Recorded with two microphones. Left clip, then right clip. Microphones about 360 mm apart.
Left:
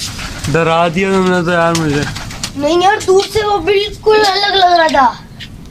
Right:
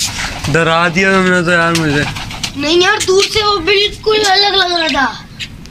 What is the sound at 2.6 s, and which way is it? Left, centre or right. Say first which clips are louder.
Speech: left 1 dB; left.